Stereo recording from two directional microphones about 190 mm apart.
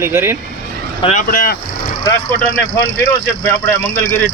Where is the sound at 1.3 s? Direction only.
50° left (ahead or behind).